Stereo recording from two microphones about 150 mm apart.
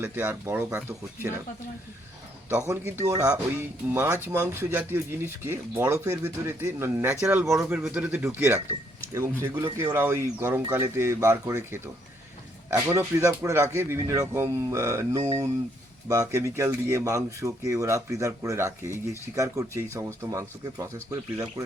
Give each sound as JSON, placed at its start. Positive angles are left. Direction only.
{"t": 0.0, "sound": "speech", "side_deg": -15}
{"t": 2.5, "sound": "speech", "side_deg": -15}